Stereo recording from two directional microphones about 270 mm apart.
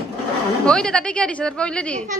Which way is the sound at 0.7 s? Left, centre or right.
Centre.